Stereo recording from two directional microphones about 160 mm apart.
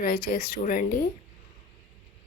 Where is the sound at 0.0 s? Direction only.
65° left (ahead or behind).